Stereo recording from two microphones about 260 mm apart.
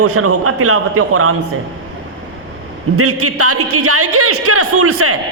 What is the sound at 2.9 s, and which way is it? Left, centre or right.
A man's voice, right.